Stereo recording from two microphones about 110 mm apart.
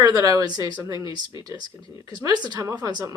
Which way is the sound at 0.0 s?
35° right (ahead or behind).